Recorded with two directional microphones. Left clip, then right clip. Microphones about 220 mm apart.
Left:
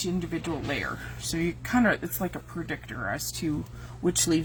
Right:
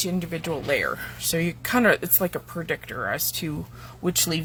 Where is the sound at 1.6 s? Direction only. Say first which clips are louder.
Right 5 dB; 50° right (ahead or behind).